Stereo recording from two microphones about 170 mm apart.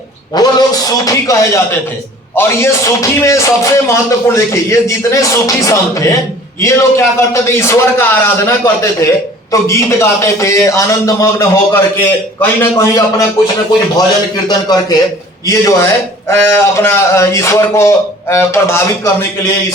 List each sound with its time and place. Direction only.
0.3 s speech: 20° left (ahead or behind)
14.4 s speech: 20° left (ahead or behind)